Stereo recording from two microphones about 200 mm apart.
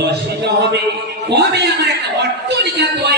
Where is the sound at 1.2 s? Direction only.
55° right (ahead or behind).